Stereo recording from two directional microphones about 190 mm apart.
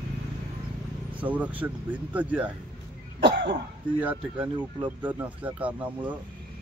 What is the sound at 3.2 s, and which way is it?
Cough, 60° right (ahead or behind).